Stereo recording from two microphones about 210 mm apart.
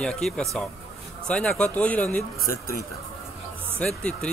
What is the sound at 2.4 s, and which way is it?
Speech, 45° left (ahead or behind).